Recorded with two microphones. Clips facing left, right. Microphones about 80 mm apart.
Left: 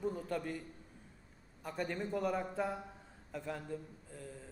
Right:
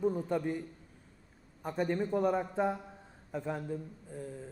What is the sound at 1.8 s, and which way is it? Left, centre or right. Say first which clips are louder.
A man's voice: right 7 dB; centre.